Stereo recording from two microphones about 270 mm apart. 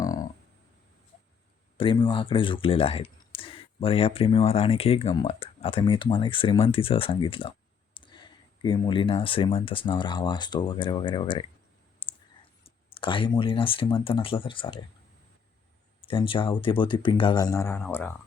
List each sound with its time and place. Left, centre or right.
0.0 s a sound: centre
1.8 s speech: centre
12.0 s clicking: centre
12.6 s speech: centre
16.0 s speech: centre